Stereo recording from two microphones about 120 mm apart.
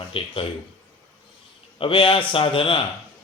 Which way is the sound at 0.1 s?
50° left (ahead or behind).